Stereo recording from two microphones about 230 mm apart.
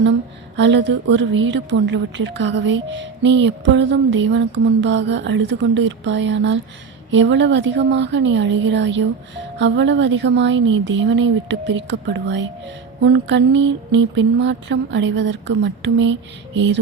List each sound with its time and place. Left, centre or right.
0.0 s a woman's voice: right